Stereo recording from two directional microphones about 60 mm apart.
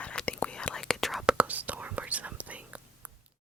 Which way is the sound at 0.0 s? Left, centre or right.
Centre.